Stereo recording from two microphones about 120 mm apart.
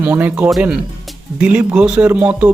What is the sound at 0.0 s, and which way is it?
Music, 15° right (ahead or behind).